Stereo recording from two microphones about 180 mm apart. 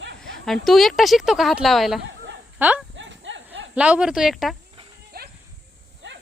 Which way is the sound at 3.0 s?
90° right.